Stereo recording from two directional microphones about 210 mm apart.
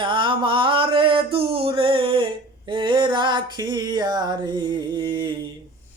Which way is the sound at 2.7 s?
25° right (ahead or behind).